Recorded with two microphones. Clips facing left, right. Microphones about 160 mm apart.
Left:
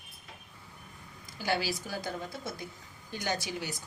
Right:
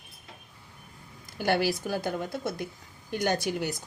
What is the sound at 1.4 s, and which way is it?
A woman's voice, 60° right (ahead or behind).